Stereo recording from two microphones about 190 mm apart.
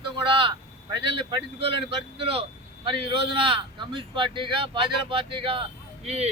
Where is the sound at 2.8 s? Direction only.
25° right (ahead or behind).